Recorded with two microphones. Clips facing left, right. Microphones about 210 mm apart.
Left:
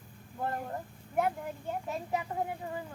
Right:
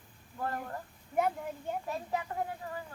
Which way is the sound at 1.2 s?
Centre (ahead or behind).